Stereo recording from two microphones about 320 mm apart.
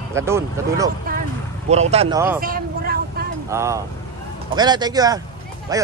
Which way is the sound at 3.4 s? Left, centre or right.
Centre.